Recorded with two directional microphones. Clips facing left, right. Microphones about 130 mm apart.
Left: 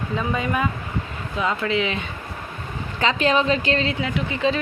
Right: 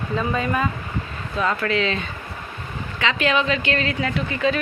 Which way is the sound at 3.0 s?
35° left (ahead or behind).